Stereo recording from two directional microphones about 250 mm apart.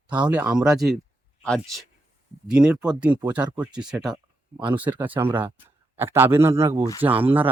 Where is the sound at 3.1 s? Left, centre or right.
Centre.